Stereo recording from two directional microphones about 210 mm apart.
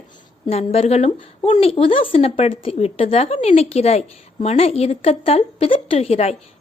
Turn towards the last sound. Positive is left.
turn(degrees=30)  # may be behind; listen again after turning